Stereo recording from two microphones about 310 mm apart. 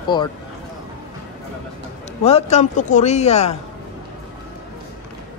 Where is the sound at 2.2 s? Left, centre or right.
Left.